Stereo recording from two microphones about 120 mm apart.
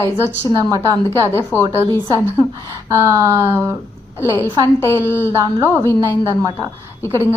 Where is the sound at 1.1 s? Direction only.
20° left (ahead or behind).